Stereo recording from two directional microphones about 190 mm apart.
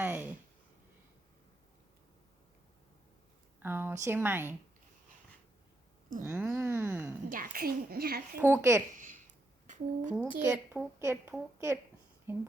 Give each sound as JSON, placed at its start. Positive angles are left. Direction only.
{"t": 0.0, "sound": "a sound", "side_deg": -10}
{"t": 3.6, "sound": "a woman's voice", "side_deg": -10}
{"t": 6.2, "sound": "a woman's voice", "side_deg": -10}
{"t": 7.3, "sound": "a woman's voice", "side_deg": -45}
{"t": 8.4, "sound": "a woman's voice", "side_deg": -15}
{"t": 9.0, "sound": "a sound", "side_deg": -45}
{"t": 9.6, "sound": "speech", "side_deg": -40}
{"t": 10.2, "sound": "a woman's voice", "side_deg": -10}